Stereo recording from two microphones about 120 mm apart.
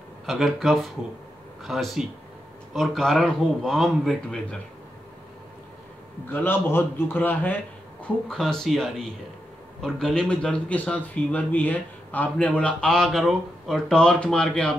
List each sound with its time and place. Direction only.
0.3 s a man's voice: centre (ahead or behind)
6.3 s a man's voice: 15° left (ahead or behind)
8.0 s a man's voice: 5° left (ahead or behind)